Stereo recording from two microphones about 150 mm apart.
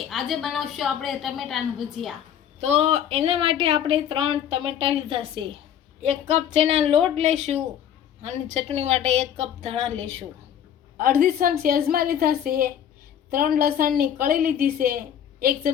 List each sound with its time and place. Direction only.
0.1 s a woman's voice: centre (ahead or behind)
2.6 s a woman's voice: 45° right (ahead or behind)
10.9 s a woman's voice: 70° right (ahead or behind)